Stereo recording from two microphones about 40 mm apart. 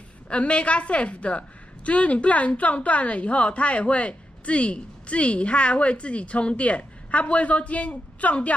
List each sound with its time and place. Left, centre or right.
0.3 s a woman's voice: left